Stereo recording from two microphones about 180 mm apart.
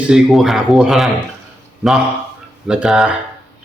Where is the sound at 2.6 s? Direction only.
5° right (ahead or behind).